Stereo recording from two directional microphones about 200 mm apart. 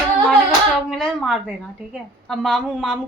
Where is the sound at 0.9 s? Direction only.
Centre (ahead or behind).